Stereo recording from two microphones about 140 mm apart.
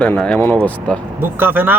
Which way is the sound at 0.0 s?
5° left (ahead or behind).